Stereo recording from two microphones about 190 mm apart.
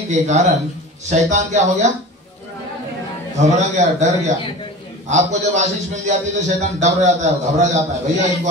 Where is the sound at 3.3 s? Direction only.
35° right (ahead or behind).